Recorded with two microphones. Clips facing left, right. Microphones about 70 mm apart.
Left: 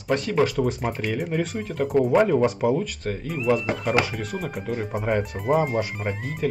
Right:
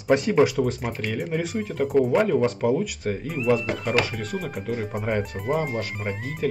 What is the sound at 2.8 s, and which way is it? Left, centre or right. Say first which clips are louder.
Speech: right 2 dB; centre.